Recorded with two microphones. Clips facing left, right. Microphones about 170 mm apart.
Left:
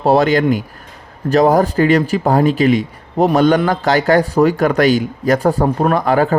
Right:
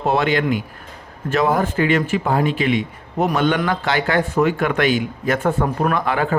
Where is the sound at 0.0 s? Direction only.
40° left (ahead or behind).